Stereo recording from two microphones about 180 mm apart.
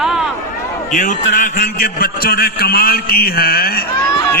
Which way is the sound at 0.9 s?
45° left (ahead or behind).